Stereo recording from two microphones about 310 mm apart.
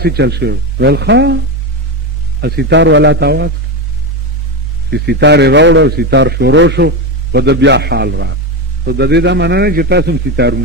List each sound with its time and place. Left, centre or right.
0.0 s a man's voice: right
2.4 s a man's voice: right
4.9 s a man's voice: right